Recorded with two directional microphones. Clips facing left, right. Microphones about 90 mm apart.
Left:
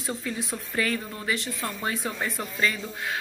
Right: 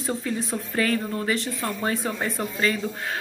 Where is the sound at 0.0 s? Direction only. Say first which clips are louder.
Right 4 dB; 35° right (ahead or behind).